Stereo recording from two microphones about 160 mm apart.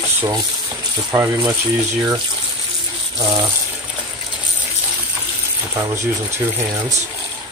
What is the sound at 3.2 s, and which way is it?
Speech, 30° right (ahead or behind).